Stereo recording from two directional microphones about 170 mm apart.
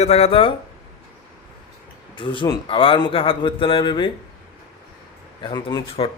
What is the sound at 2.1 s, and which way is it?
A man's voice, 30° left (ahead or behind).